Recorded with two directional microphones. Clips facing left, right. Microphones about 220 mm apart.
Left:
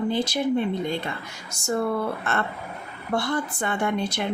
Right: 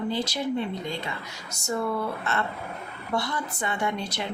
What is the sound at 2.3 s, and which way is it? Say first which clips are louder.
Speech: left 2 dB; 50° left (ahead or behind).